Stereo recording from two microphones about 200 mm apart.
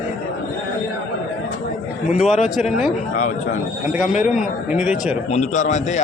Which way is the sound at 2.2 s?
Centre (ahead or behind).